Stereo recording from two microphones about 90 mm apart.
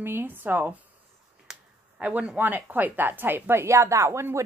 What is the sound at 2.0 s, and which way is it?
A woman's voice, 15° right (ahead or behind).